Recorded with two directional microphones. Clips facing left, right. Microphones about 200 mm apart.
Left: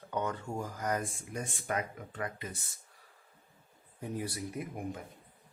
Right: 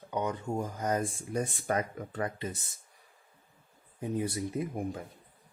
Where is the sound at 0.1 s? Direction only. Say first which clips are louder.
Right 3 dB; 15° right (ahead or behind); by 2.5 s 35° right (ahead or behind).